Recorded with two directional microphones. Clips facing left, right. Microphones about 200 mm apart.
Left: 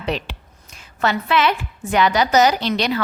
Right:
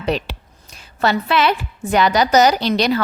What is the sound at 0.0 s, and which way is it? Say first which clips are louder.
A woman's voice: right 3 dB; 40° right (ahead or behind).